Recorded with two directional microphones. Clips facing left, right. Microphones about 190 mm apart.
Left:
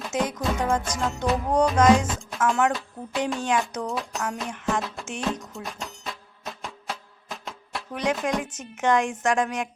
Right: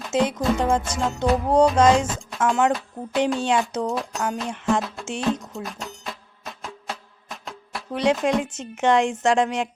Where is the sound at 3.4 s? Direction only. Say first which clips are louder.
Right 3 dB; 30° right (ahead or behind).